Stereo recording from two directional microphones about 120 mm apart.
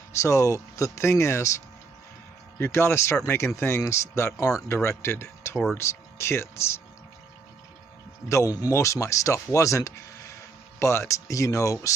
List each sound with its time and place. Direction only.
0.1 s speech: 25° left (ahead or behind)
2.6 s speech: 20° left (ahead or behind)
8.3 s speech: 25° left (ahead or behind)